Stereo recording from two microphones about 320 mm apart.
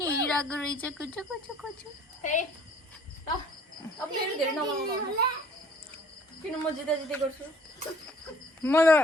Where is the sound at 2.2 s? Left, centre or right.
Left.